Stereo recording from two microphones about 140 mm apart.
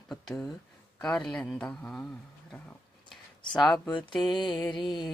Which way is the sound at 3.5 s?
5° left (ahead or behind).